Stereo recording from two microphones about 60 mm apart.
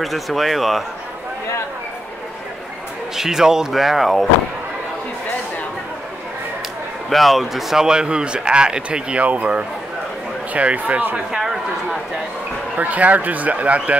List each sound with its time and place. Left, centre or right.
0.0 s speech: centre
3.2 s speech: centre
7.1 s speech: centre; by 11.1 s right
11.1 s a sound: centre
12.7 s speech: right